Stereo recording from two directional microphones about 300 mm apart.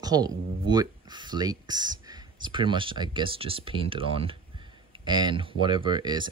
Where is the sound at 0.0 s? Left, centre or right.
Centre.